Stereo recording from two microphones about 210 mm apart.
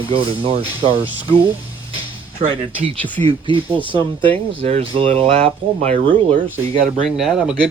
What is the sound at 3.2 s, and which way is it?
Speech, 25° right (ahead or behind).